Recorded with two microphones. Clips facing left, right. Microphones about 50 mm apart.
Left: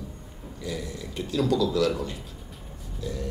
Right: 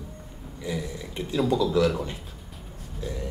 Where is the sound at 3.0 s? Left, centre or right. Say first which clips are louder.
Even; right.